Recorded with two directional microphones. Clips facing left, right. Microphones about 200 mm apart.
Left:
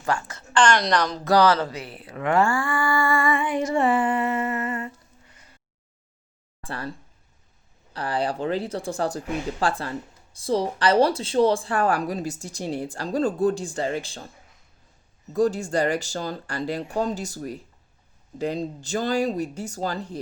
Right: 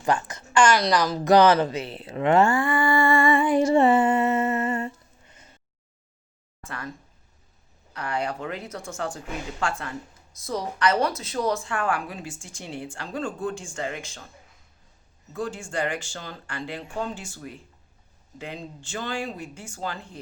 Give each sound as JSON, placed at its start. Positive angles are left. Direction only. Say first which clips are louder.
{"t": 0.0, "sound": "a woman's voice", "louder": "right 2 dB", "side_deg": -20}
{"t": 1.2, "sound": "speech", "louder": "right 3 dB", "side_deg": -20}
{"t": 3.4, "sound": "a sound", "louder": "right 4 dB", "side_deg": -35}
{"t": 6.6, "sound": "speech", "louder": "left 4 dB", "side_deg": 30}
{"t": 7.9, "sound": "speech", "louder": "left 3 dB", "side_deg": 30}
{"t": 15.3, "sound": "speech", "louder": "left 9 dB", "side_deg": 40}